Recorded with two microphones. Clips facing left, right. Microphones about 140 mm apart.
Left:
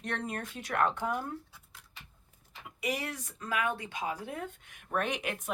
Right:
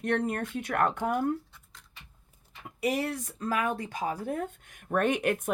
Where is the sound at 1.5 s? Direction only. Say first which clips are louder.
Even; 5° left (ahead or behind).